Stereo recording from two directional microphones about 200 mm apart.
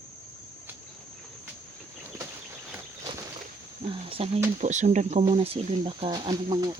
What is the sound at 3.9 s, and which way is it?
Speech, 25° right (ahead or behind).